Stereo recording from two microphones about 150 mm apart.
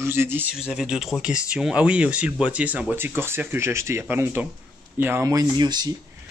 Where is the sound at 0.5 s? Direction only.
5° right (ahead or behind); by 5.9 s 30° right (ahead or behind).